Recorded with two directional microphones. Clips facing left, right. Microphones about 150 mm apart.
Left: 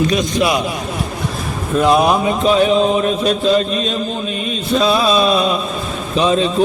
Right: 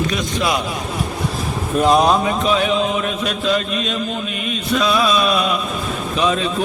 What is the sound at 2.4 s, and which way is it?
Speech, 35° left (ahead or behind).